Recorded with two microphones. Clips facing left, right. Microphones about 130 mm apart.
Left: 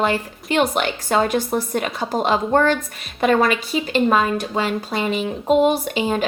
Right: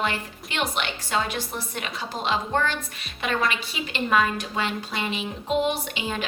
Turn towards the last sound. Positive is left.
turn(degrees=40)  # may be behind; listen again after turning